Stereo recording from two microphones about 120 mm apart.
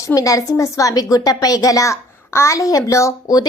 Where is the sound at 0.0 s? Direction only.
30° left (ahead or behind).